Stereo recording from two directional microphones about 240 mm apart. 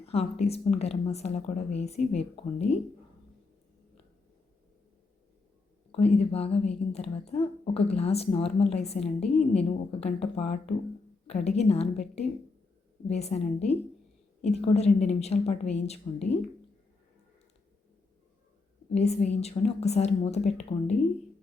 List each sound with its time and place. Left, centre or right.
0.0 s a woman's voice: left
5.9 s a woman's voice: left
18.9 s a woman's voice: left